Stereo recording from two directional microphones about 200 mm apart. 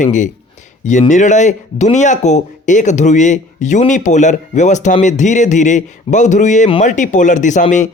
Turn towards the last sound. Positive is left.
turn(degrees=35)  # may be behind; listen again after turning